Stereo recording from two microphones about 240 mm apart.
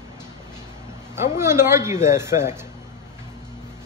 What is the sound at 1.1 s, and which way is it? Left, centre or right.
A man's voice, centre.